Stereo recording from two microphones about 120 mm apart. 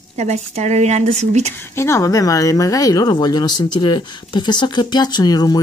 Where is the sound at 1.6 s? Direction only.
20° left (ahead or behind).